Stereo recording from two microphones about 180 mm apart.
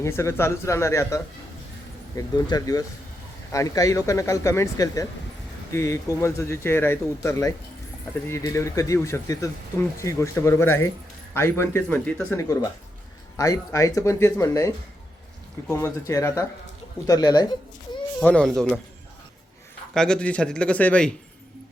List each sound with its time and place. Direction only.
0.0 s speech: 15° left (ahead or behind)
15.7 s speech: 15° left (ahead or behind)
18.2 s speech: 5° left (ahead or behind)
19.9 s speech: 5° left (ahead or behind)